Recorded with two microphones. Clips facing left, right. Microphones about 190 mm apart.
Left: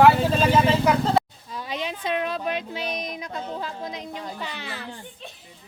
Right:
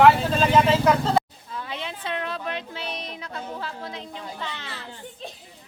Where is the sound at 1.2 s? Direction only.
Centre (ahead or behind).